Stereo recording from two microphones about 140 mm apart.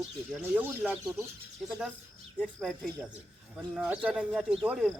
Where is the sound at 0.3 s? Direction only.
10° right (ahead or behind).